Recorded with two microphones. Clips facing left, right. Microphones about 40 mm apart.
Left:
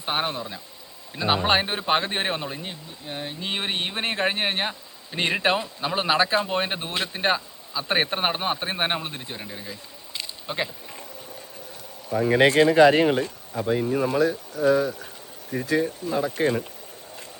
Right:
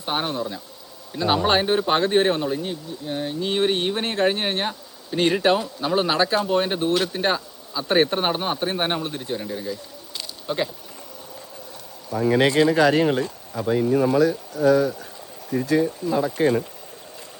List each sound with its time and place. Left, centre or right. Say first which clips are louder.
0.0 s speech: right 2 dB; centre
12.2 s speech: even; left
13.2 s speech: right 1 dB; left
13.7 s speech: right 3 dB; centre
13.9 s speech: right 5 dB; left